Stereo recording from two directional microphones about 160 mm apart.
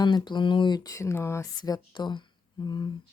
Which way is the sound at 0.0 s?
30° left (ahead or behind).